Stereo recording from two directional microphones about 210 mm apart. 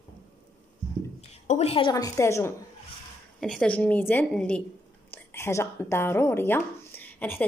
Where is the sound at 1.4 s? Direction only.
30° left (ahead or behind); by 7.4 s 10° left (ahead or behind).